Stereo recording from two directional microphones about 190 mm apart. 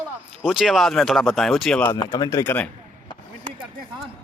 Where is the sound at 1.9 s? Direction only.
20° left (ahead or behind).